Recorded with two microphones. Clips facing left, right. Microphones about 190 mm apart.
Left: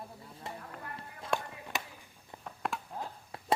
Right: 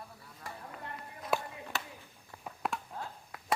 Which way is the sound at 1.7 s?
15° left (ahead or behind).